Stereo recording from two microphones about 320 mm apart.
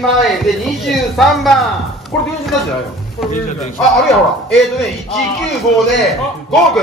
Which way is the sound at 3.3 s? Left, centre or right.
Left.